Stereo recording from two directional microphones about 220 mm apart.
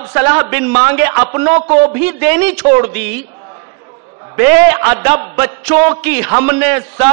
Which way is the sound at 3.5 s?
20° right (ahead or behind).